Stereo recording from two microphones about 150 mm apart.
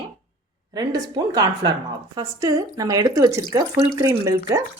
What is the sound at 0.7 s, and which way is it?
Speech, 25° right (ahead or behind).